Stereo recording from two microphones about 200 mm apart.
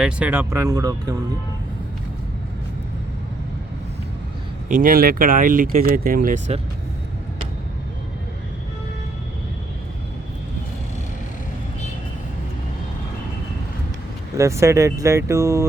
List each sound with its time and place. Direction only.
0.0 s speech: 10° right (ahead or behind)
4.7 s speech: 45° right (ahead or behind)
14.3 s speech: 15° right (ahead or behind)